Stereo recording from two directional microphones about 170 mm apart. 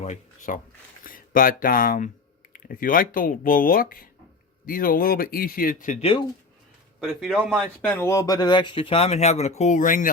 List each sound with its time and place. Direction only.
0.0 s speech: 45° left (ahead or behind)
6.0 s speech: 35° left (ahead or behind)
7.0 s speech: centre (ahead or behind)
7.8 s speech: 10° left (ahead or behind); by 10.1 s 50° left (ahead or behind)